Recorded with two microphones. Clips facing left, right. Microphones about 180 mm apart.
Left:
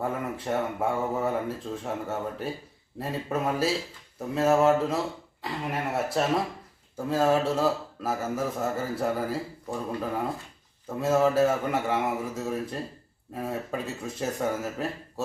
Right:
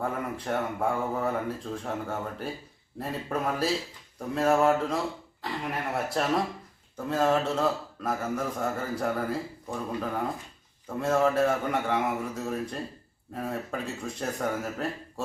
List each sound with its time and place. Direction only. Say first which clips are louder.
0.0 s a man's voice: left 1 dB; centre (ahead or behind)